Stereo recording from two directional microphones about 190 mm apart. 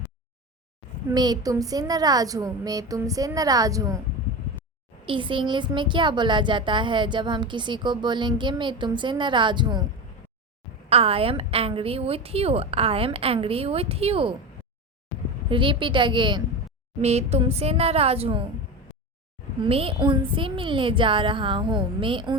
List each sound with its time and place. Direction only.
1.1 s speech: 20° right (ahead or behind)
5.0 s speech: 25° right (ahead or behind)
10.8 s a woman's voice: 30° right (ahead or behind)
15.4 s a woman's voice: 25° right (ahead or behind)
19.6 s speech: 30° right (ahead or behind)